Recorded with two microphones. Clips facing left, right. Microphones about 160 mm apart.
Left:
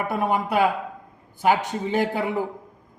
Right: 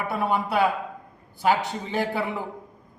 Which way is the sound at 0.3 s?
45° left (ahead or behind).